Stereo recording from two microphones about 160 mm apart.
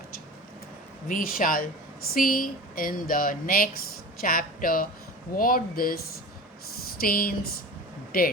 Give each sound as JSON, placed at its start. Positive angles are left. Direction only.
{"t": 1.0, "sound": "speech", "side_deg": 60}
{"t": 7.0, "sound": "speech", "side_deg": 65}